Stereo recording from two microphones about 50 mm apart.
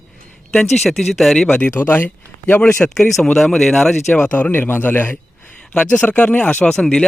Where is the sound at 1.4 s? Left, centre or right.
Left.